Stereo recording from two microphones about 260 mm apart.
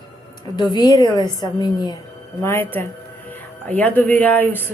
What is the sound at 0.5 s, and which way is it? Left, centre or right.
A woman's voice, centre.